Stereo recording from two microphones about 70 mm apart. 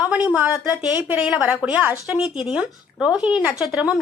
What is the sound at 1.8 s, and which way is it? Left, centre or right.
Speech, right.